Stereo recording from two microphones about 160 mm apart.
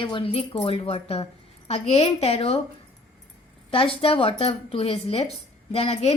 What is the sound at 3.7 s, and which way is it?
A woman's voice, 35° left (ahead or behind).